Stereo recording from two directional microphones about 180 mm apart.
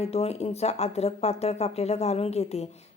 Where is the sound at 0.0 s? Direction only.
35° left (ahead or behind).